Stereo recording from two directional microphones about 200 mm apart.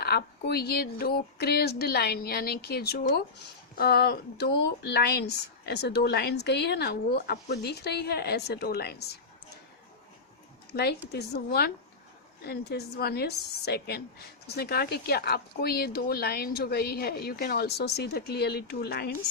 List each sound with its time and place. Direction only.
0.0 s a woman's voice: 50° left (ahead or behind)
10.7 s a woman's voice: 55° left (ahead or behind)